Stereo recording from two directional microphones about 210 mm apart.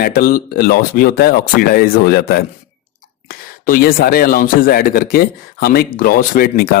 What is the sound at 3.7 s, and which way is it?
Speech, 45° left (ahead or behind).